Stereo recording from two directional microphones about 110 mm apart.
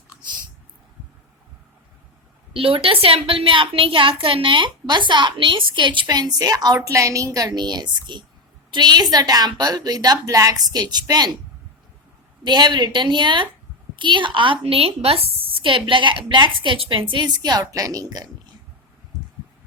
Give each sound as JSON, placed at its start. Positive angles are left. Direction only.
{"t": 2.5, "sound": "a woman's voice", "side_deg": -55}
{"t": 12.5, "sound": "a woman's voice", "side_deg": -40}